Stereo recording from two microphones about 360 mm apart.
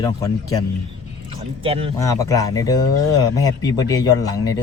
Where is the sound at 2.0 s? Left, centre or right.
Centre.